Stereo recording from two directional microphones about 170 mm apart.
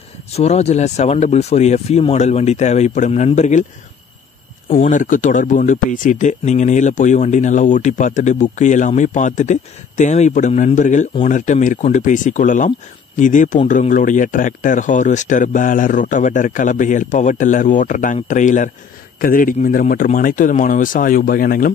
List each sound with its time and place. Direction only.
0.3 s speech: 40° left (ahead or behind)
4.7 s a man's voice: 50° left (ahead or behind)